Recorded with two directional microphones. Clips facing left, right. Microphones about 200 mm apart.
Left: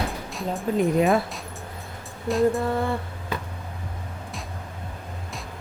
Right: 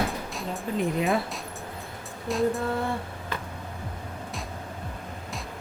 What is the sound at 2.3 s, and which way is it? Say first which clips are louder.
Speech: left 4 dB; centre (ahead or behind).